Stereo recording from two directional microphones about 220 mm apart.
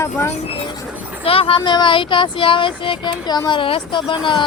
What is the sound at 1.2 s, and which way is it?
Speech, 25° left (ahead or behind).